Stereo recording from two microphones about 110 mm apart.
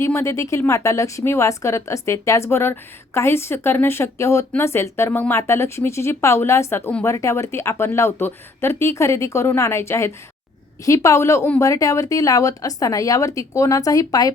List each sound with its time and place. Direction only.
0.0 s speech: 25° left (ahead or behind)